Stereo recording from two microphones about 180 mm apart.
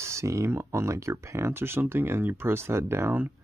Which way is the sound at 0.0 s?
15° right (ahead or behind).